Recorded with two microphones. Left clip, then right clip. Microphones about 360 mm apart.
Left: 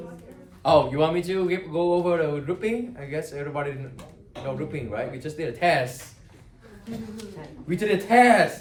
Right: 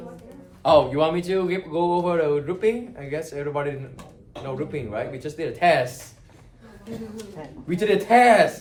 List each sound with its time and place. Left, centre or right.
0.6 s speech: centre
7.7 s speech: centre